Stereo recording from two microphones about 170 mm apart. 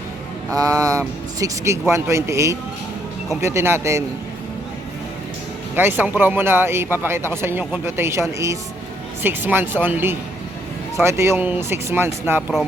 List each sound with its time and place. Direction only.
0.5 s a man's voice: 20° right (ahead or behind)
5.7 s a man's voice: 10° right (ahead or behind)